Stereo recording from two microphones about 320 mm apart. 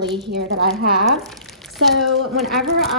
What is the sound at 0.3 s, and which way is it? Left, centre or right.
Speech, right.